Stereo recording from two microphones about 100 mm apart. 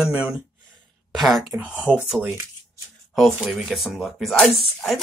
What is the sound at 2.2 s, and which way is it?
Speech, 25° right (ahead or behind).